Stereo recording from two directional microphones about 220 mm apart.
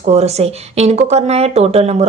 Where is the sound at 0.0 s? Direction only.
30° right (ahead or behind).